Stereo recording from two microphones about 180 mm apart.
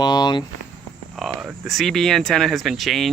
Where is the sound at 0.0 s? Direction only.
25° left (ahead or behind).